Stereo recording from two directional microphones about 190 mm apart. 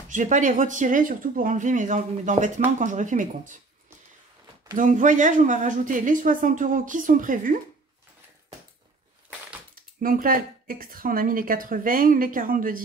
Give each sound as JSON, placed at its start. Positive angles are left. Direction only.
{"t": 0.1, "sound": "speech", "side_deg": -40}
{"t": 4.7, "sound": "speech", "side_deg": -40}
{"t": 9.9, "sound": "speech", "side_deg": -50}